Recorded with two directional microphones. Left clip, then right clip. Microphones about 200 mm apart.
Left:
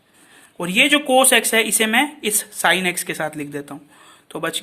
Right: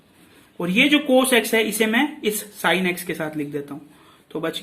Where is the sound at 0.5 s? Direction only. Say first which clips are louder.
Left 2 dB; 45° left (ahead or behind).